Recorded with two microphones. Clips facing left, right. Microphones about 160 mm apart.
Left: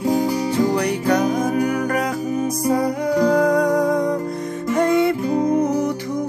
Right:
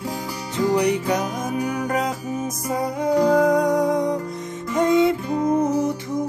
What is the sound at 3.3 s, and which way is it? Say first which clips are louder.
Music: left 1 dB; centre (ahead or behind).